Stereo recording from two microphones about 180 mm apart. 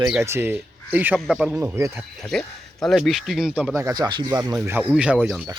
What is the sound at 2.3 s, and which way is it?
Speech, 5° left (ahead or behind).